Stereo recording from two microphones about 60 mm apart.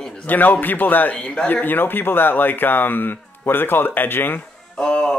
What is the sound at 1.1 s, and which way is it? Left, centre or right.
Speech, centre.